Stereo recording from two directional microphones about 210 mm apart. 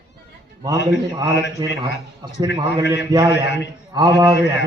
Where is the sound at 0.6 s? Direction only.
20° right (ahead or behind).